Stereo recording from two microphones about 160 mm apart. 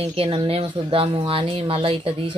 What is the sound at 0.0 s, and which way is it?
Speech, 35° right (ahead or behind).